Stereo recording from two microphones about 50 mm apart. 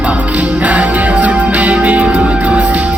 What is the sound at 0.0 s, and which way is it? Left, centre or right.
Music, right.